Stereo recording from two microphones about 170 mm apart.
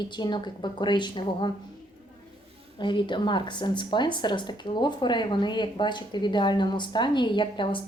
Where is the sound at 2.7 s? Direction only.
25° left (ahead or behind).